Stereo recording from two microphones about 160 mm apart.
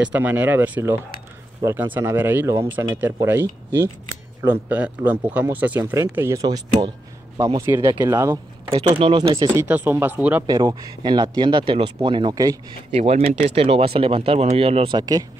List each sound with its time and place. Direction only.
0.0 s speech: 10° right (ahead or behind)
8.7 s speech: 40° right (ahead or behind)
9.6 s speech: 10° right (ahead or behind)
10.4 s speech: 25° right (ahead or behind)
12.9 s speech: 40° right (ahead or behind); by 15.2 s 25° right (ahead or behind)